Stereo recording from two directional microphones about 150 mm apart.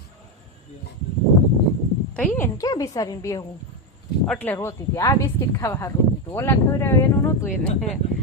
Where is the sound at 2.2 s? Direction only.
10° left (ahead or behind).